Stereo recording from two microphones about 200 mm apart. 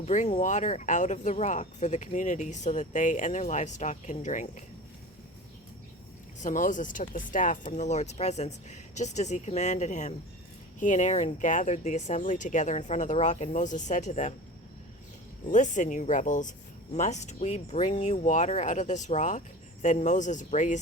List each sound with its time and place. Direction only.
0.0 s speech: 35° left (ahead or behind)
6.4 s speech: 40° left (ahead or behind)
15.4 s speech: 40° left (ahead or behind)